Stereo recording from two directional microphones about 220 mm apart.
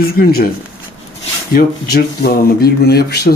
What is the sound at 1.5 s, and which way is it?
Speech, 45° left (ahead or behind).